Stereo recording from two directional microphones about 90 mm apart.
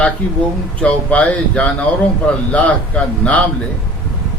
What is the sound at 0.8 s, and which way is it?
Speech, 15° left (ahead or behind).